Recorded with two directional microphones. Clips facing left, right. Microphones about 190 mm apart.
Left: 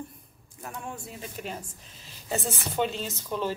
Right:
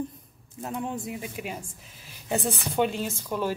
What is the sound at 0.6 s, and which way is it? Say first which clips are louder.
Speech: right 7 dB; 20° right (ahead or behind).